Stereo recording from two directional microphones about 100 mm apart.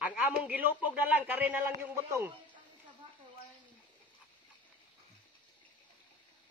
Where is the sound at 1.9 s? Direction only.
30° right (ahead or behind).